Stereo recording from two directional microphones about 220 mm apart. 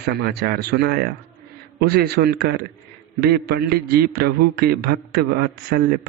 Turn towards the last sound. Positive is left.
turn(degrees=-45)  # may be behind; listen again after turning